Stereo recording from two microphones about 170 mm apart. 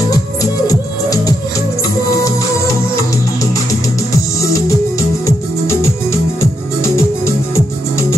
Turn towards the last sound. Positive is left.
turn(degrees=15)  # may be behind; listen again after turning